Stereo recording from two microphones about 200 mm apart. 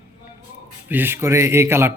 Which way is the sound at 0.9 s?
10° right (ahead or behind).